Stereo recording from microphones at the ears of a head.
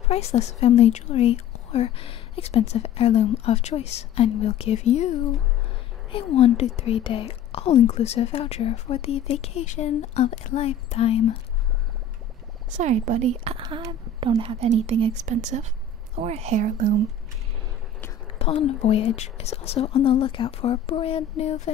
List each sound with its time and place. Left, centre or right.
0.1 s speech: left
12.7 s a woman's voice: right
18.4 s speech: left